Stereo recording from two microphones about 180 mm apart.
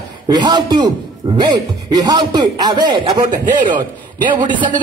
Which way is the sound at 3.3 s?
45° right (ahead or behind).